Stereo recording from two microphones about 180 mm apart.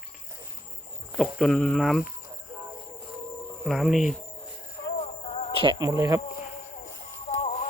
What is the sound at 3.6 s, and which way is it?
Speech, centre (ahead or behind).